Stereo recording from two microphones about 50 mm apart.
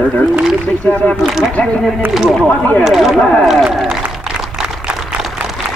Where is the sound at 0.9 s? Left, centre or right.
Left.